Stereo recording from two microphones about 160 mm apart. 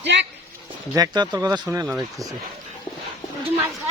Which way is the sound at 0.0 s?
90° right.